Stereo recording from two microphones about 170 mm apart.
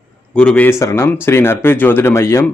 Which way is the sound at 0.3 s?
5° left (ahead or behind).